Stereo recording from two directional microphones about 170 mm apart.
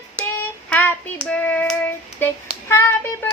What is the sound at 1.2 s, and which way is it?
Child singing, 10° left (ahead or behind).